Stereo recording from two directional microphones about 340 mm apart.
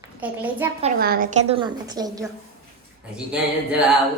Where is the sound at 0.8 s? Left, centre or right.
Right.